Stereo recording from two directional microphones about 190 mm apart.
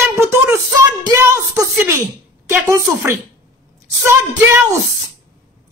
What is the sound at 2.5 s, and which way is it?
Speech, 15° right (ahead or behind).